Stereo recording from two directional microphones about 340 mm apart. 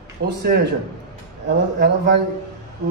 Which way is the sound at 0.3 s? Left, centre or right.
Right.